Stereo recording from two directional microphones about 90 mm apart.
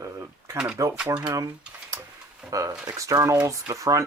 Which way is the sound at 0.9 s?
10° right (ahead or behind).